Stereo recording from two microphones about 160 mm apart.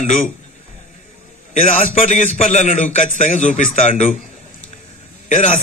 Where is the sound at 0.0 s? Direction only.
55° left (ahead or behind).